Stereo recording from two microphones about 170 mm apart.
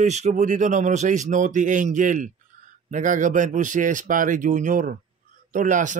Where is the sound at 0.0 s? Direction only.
45° right (ahead or behind).